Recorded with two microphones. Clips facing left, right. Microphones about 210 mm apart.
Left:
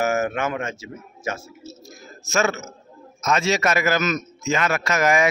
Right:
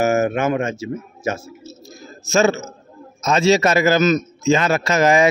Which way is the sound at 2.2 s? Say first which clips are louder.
Right 6 dB; 30° right (ahead or behind).